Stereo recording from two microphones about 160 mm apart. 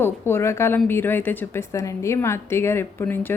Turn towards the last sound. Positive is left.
turn(degrees=15)  # may be behind; listen again after turning